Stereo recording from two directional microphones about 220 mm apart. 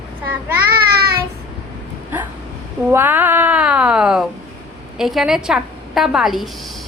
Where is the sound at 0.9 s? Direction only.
45° right (ahead or behind).